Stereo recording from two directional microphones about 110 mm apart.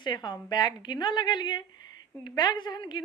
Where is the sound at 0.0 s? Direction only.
40° left (ahead or behind).